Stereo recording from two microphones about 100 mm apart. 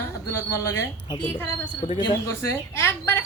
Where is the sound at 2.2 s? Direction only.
25° left (ahead or behind).